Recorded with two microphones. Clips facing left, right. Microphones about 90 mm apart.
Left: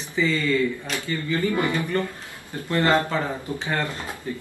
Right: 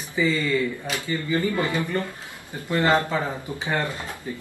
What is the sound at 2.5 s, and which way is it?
Speech, 20° right (ahead or behind).